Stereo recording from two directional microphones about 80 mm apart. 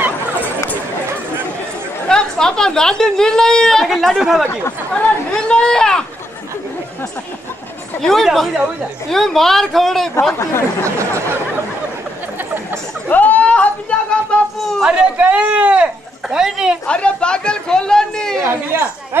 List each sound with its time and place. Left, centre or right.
2.0 s a woman's voice: centre
5.3 s a sound: centre
8.0 s speech: centre
10.8 s speech: right
13.1 s a sound: left
14.8 s speech: centre
16.8 s speech: centre
18.4 s speech: right